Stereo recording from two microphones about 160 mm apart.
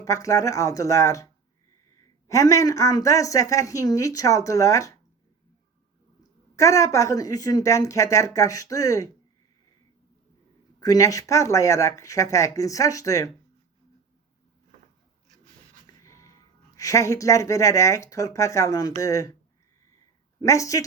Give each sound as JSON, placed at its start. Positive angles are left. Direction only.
{"t": 0.0, "sound": "speech", "side_deg": 20}
{"t": 6.6, "sound": "speech", "side_deg": 20}
{"t": 10.8, "sound": "speech", "side_deg": 20}
{"t": 16.0, "sound": "speech", "side_deg": 20}
{"t": 20.4, "sound": "speech", "side_deg": 20}